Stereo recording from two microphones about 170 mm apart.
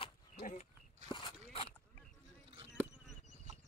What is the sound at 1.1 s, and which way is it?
Biting, 30° left (ahead or behind).